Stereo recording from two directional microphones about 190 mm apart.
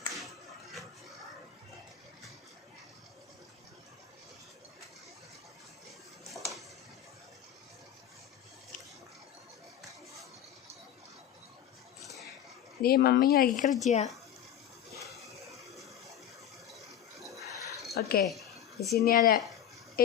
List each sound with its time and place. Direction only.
0.1 s a sound: centre (ahead or behind)
12.8 s a woman's voice: 55° left (ahead or behind); by 14.1 s 35° left (ahead or behind)
16.7 s ratchet: centre (ahead or behind)
17.9 s speech: 55° left (ahead or behind)
18.3 s a sound: centre (ahead or behind)
19.0 s a woman's voice: 50° left (ahead or behind)